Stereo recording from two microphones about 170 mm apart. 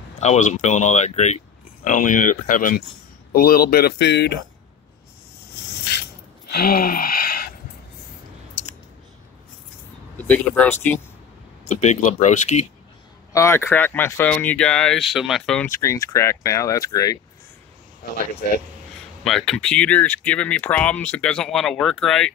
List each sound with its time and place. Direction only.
0.2 s speech: 40° left (ahead or behind); by 4.4 s 80° left
6.5 s a sound: 60° left (ahead or behind)
10.1 s speech: 10° left (ahead or behind)
11.7 s speech: 45° left (ahead or behind)
13.3 s speech: 15° left (ahead or behind)
15.6 s speech: 15° left (ahead or behind)
19.2 s speech: centre (ahead or behind)